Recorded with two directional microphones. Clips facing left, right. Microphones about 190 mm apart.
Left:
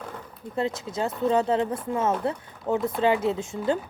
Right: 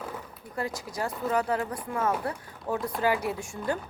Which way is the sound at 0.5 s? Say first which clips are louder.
Left 5 dB; 25° left (ahead or behind).